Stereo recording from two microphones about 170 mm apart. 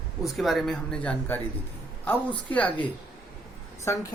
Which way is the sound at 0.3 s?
Centre (ahead or behind).